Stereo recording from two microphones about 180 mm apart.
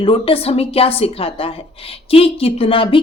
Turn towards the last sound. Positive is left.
turn(degrees=30)  # may be behind; listen again after turning